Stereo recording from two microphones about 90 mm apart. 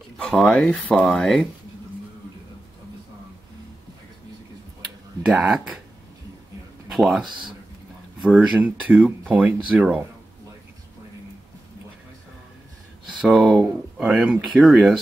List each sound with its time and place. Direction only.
0.2 s speech: 5° left (ahead or behind)
5.3 s speech: 10° right (ahead or behind)
7.2 s speech: 60° right (ahead or behind)
8.2 s speech: 5° right (ahead or behind)
8.5 s speech: 20° right (ahead or behind)
13.2 s speech: 5° right (ahead or behind)